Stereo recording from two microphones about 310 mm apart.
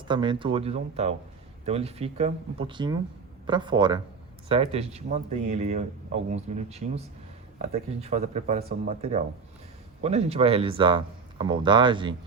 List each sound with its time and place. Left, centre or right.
0.1 s a man's voice: centre